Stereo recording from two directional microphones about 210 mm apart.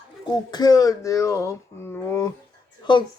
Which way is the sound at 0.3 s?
20° left (ahead or behind).